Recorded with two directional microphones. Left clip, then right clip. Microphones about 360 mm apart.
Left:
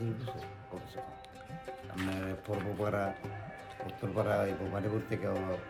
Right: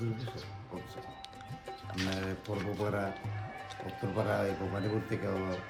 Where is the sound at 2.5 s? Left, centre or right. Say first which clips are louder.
Left 2 dB; centre.